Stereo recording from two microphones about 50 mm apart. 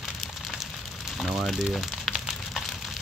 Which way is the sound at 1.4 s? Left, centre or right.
Centre.